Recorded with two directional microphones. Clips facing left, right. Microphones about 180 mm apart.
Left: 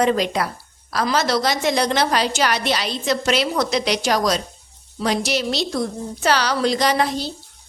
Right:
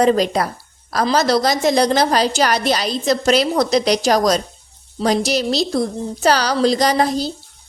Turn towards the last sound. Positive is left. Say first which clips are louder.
# right 3 dB
turn(degrees=-40)  # may be behind; listen again after turning